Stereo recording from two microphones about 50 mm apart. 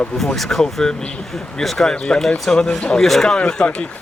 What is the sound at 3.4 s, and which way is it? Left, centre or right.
Speech, centre.